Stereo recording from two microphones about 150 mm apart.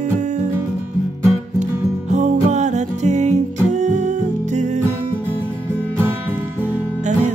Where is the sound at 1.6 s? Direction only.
55° right (ahead or behind).